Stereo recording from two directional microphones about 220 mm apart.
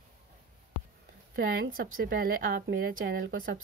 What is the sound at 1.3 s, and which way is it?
Speech, 45° right (ahead or behind).